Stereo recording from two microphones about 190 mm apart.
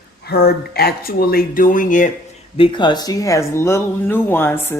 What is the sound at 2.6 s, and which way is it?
A woman's voice, 25° left (ahead or behind).